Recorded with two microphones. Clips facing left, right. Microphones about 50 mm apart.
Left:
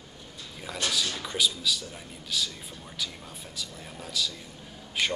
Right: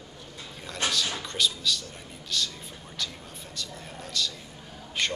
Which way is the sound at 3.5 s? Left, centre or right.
Centre.